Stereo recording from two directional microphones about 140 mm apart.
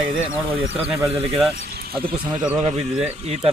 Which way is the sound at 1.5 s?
90° right.